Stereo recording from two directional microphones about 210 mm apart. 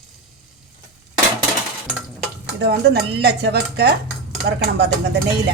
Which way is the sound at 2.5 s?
55° right (ahead or behind).